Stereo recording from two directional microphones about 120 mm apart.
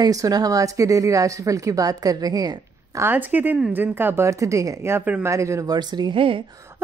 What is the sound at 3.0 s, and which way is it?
A woman's voice, 15° right (ahead or behind).